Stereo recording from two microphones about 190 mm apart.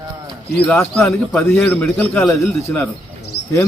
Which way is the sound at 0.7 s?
15° left (ahead or behind).